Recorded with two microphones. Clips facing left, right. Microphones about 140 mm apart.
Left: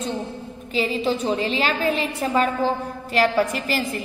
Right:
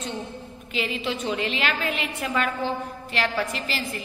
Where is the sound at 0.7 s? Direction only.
35° left (ahead or behind).